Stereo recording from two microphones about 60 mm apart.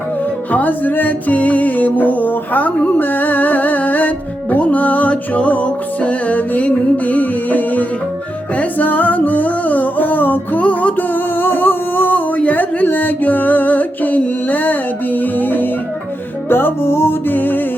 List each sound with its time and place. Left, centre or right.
0.5 s music: left